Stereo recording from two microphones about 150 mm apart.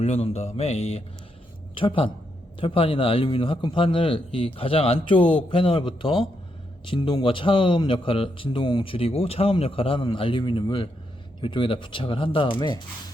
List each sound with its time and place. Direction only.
0.0 s a man's voice: 40° left (ahead or behind)